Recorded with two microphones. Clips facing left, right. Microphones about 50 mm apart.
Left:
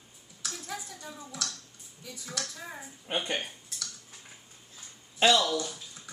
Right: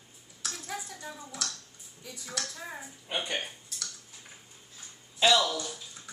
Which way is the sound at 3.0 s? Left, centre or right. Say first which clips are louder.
Left 2 dB; left.